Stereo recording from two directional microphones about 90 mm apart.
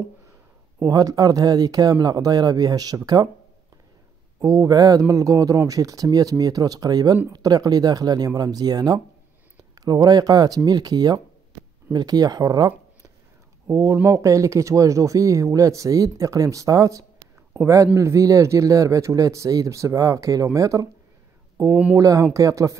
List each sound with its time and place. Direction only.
0.8 s speech: 40° right (ahead or behind)
4.4 s a man's voice: 45° right (ahead or behind)